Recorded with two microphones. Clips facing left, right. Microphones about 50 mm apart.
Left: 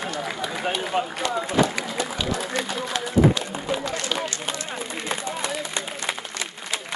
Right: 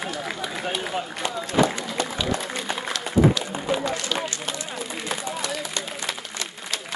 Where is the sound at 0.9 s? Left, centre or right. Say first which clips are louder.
Left 4 dB; left.